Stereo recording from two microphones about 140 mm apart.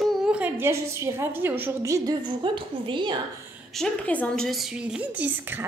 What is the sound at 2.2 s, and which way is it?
Speech, 35° right (ahead or behind).